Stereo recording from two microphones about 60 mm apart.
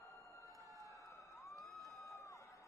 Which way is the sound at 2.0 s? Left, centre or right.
Left.